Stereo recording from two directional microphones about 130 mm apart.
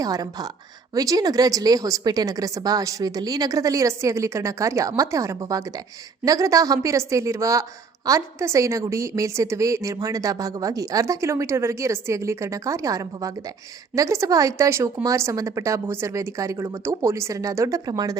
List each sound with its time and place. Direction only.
0.0 s a woman's voice: 30° right (ahead or behind)